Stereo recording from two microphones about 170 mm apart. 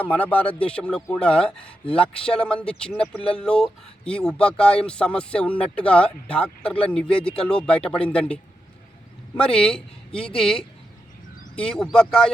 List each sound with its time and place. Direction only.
0.0 s speech: 10° left (ahead or behind)
9.4 s speech: 5° left (ahead or behind)